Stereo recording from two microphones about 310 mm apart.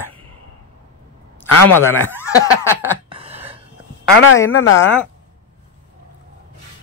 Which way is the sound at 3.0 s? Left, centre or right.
Centre.